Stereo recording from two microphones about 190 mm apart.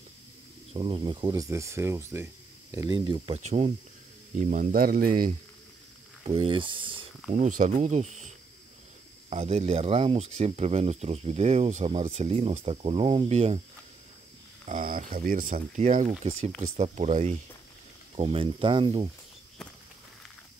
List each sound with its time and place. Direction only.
0.7 s speech: 25° right (ahead or behind)
3.3 s speech: 35° right (ahead or behind)
6.2 s speech: 30° right (ahead or behind)
7.3 s speech: 40° right (ahead or behind)
9.3 s speech: 30° right (ahead or behind)
14.7 s speech: 45° right (ahead or behind); by 19.0 s 25° right (ahead or behind)